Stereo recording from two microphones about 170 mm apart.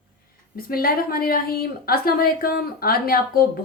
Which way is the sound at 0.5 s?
60° left (ahead or behind).